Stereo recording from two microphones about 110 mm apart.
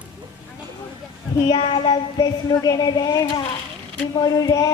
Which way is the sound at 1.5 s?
55° left (ahead or behind).